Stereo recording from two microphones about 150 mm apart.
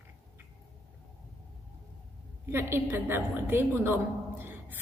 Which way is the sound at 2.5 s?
15° right (ahead or behind).